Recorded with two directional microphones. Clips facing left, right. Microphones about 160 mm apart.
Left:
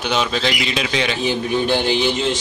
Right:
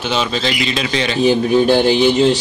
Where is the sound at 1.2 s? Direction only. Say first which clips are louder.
Right 11 dB; 45° right (ahead or behind).